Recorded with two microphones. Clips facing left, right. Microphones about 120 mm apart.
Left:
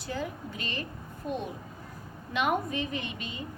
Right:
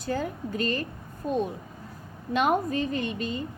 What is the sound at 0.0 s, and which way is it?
Speech, 45° right (ahead or behind).